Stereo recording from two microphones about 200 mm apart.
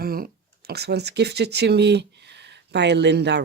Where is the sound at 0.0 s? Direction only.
50° right (ahead or behind).